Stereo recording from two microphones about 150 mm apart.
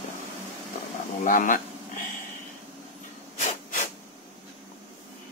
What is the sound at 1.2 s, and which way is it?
Speech, 60° left (ahead or behind).